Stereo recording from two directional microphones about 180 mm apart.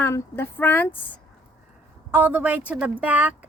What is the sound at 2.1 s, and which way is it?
Speech, 10° right (ahead or behind).